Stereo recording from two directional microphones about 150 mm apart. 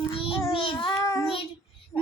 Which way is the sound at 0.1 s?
40° left (ahead or behind).